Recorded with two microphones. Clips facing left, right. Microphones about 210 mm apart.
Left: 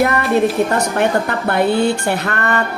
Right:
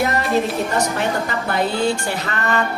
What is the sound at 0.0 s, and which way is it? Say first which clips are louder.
A woman's voice: left 4 dB; 60° left (ahead or behind).